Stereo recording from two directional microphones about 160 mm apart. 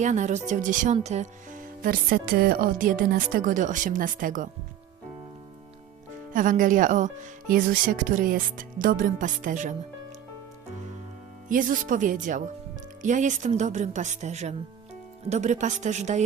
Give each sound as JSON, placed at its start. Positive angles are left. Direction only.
{"t": 0.0, "sound": "speech", "side_deg": -50}
{"t": 0.9, "sound": "speech", "side_deg": -45}
{"t": 6.3, "sound": "speech", "side_deg": -55}
{"t": 11.4, "sound": "speech", "side_deg": -55}